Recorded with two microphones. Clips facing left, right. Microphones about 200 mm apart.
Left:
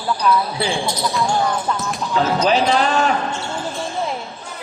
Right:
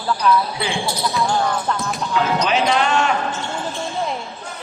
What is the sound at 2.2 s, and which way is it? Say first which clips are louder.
Speech: left 3 dB; 35° left (ahead or behind).